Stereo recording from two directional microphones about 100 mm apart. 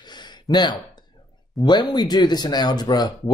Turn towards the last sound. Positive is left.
turn(degrees=45)  # may be behind; listen again after turning